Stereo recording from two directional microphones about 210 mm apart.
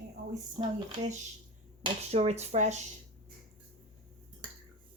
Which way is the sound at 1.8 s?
30° right (ahead or behind).